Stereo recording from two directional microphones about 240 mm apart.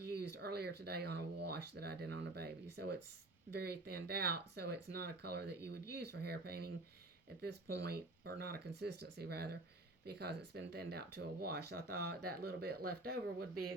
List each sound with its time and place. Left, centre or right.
0.1 s speech: right
5.5 s speech: right
5.9 s speech: right
7.9 s speech: right